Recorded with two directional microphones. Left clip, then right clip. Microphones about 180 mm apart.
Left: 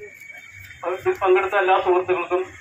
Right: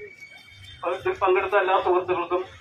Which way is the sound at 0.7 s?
20° left (ahead or behind).